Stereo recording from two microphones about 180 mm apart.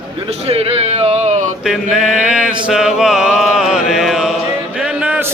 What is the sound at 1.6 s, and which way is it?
Mantra, centre (ahead or behind).